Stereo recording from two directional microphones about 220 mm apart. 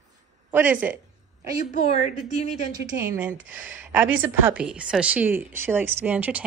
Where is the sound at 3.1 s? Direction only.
5° right (ahead or behind).